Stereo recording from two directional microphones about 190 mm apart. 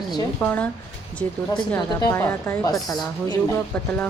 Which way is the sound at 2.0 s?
15° left (ahead or behind).